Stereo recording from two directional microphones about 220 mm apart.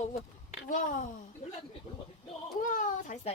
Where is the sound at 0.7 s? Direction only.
35° left (ahead or behind).